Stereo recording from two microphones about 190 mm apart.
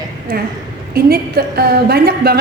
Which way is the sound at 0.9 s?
55° right (ahead or behind).